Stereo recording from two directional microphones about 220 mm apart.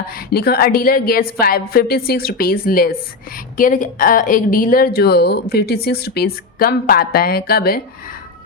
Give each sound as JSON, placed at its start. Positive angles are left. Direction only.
{"t": 0.3, "sound": "speech", "side_deg": 45}